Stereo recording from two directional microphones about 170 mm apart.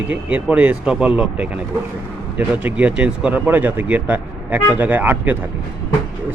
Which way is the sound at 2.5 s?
10° right (ahead or behind).